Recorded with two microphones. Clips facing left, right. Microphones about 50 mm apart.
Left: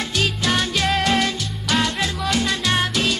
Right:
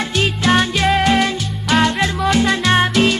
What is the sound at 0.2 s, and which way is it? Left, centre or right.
Music, right.